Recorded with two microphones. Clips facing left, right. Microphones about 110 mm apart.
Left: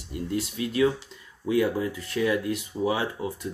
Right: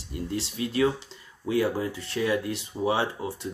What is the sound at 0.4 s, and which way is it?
Speech, 30° right (ahead or behind).